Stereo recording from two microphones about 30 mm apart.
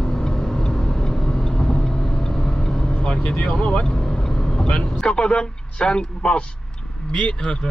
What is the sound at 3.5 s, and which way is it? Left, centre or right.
Speech, left.